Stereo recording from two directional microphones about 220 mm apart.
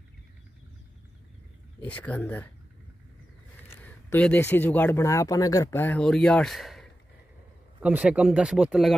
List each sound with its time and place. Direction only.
1.8 s speech: 5° left (ahead or behind)
3.8 s speech: 5° left (ahead or behind)